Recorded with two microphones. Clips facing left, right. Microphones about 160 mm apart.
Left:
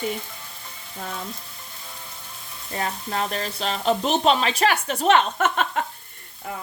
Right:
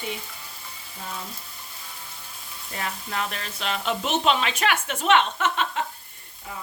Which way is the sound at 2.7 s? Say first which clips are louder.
Left 4 dB; 35° left (ahead or behind).